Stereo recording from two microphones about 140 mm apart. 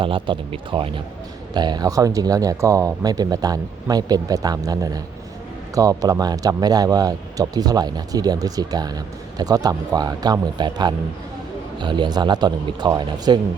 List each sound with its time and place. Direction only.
0.0 s speech: 40° right (ahead or behind)